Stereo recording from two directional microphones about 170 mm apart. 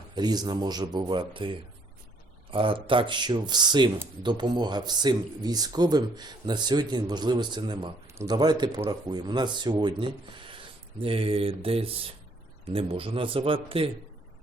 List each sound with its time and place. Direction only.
0.2 s speech: 25° right (ahead or behind)